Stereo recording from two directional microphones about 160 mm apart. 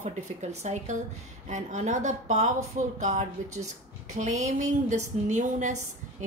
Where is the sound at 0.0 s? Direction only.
45° right (ahead or behind).